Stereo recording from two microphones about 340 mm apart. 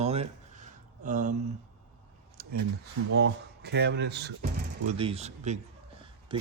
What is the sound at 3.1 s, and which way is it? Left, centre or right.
Speech, right.